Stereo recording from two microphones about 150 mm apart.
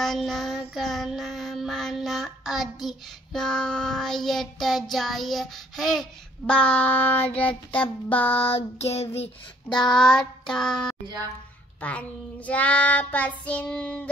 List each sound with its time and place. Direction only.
0.0 s child singing: centre (ahead or behind)
8.5 s child singing: 45° left (ahead or behind)
9.7 s child singing: 5° left (ahead or behind)